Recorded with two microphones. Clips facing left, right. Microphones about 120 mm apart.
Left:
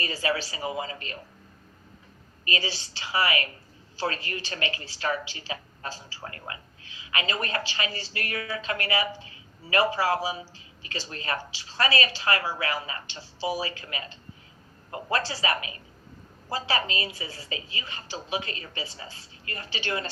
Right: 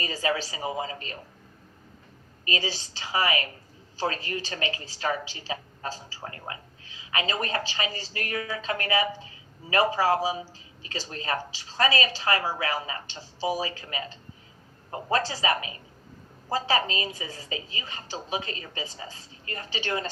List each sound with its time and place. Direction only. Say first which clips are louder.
0.0 s speech: right 1 dB; 40° right (ahead or behind)
2.5 s speech: right 1 dB; 45° right (ahead or behind)
15.1 s speech: right 2 dB; 40° right (ahead or behind)